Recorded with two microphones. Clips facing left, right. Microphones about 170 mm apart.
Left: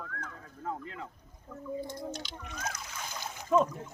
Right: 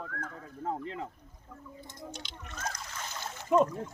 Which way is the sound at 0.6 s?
25° right (ahead or behind).